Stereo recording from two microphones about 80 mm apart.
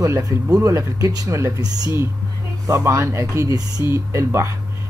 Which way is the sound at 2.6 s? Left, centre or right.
Right.